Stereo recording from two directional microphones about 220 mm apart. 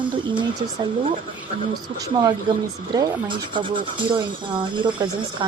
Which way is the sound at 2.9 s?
20° right (ahead or behind).